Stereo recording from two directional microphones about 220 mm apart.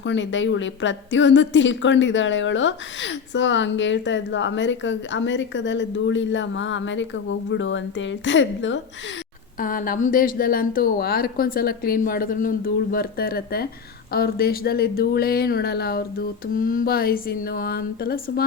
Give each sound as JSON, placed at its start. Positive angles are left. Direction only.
{"t": 0.0, "sound": "a woman's voice", "side_deg": 55}
{"t": 9.6, "sound": "speech", "side_deg": 40}